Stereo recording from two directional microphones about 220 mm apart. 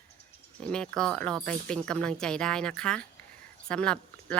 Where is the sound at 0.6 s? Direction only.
5° left (ahead or behind).